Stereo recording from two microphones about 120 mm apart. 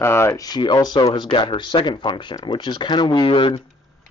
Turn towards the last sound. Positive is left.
turn(degrees=50)  # may be behind; listen again after turning